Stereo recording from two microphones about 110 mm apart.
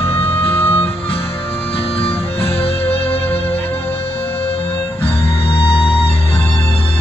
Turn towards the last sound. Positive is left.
turn(degrees=55)  # may be behind; listen again after turning